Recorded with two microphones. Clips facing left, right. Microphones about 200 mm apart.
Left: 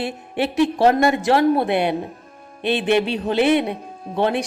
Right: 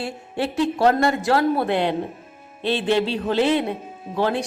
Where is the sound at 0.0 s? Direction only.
15° left (ahead or behind).